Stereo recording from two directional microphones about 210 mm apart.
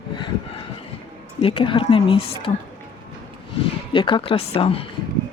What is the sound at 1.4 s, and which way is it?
A woman's voice, 25° left (ahead or behind).